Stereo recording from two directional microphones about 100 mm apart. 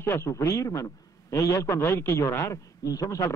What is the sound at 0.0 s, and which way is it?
A man's voice, 25° left (ahead or behind).